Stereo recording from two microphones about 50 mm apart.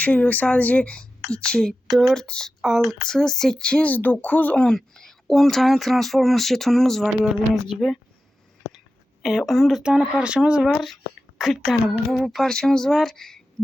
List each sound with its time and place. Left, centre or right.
0.0 s speech: left
1.9 s speech: centre
2.1 s speech: centre
2.6 s speech: centre
2.9 s speech: centre
3.6 s speech: centre
3.8 s speech: left
4.7 s speech: centre
9.4 s speech: centre
9.8 s speech: centre
10.7 s a woman's voice: centre